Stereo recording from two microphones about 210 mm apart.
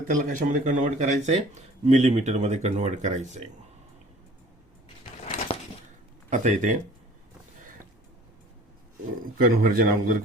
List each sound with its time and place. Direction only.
0.0 s speech: 40° right (ahead or behind)
5.2 s a sound: 30° left (ahead or behind)
6.3 s speech: 35° right (ahead or behind)
7.6 s boat: 40° right (ahead or behind)
9.4 s a man's voice: 45° right (ahead or behind)